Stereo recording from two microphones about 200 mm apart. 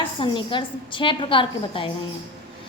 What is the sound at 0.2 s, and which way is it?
A woman's voice, 25° left (ahead or behind).